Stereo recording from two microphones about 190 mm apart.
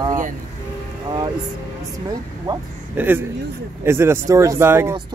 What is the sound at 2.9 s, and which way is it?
Speech, 10° right (ahead or behind).